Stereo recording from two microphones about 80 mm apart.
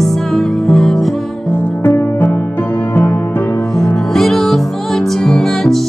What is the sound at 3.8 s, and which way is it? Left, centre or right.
Music, centre.